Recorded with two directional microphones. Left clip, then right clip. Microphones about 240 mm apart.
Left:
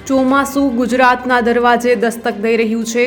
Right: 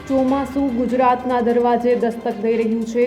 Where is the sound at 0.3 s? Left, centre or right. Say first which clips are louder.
Left 7 dB; centre.